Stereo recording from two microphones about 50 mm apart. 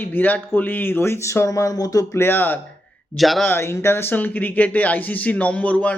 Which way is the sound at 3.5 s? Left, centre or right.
Left.